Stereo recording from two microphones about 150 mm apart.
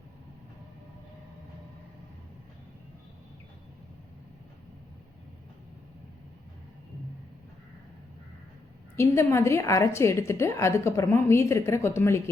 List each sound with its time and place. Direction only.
9.0 s a woman's voice: 20° left (ahead or behind)